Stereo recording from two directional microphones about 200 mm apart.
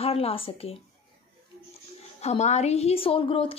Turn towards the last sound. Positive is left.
turn(degrees=25)  # may be behind; listen again after turning